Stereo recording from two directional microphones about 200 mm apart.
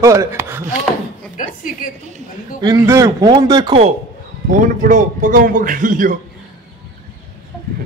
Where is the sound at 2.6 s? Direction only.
15° right (ahead or behind).